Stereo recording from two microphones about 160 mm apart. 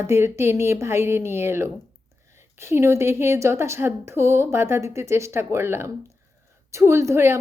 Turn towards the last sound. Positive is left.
turn(degrees=-15)  # may be behind; listen again after turning